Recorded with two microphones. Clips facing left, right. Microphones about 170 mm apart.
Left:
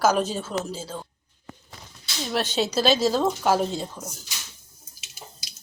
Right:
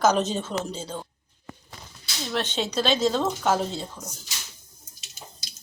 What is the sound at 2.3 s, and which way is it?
Speech, 10° left (ahead or behind).